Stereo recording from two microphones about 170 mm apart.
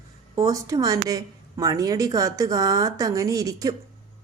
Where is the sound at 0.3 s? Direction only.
20° right (ahead or behind).